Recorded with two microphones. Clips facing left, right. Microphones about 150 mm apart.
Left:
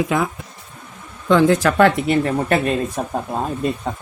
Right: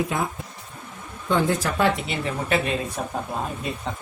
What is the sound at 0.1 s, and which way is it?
Speech, 90° left.